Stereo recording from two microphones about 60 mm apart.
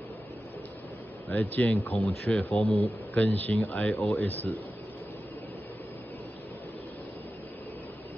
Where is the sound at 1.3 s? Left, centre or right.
Left.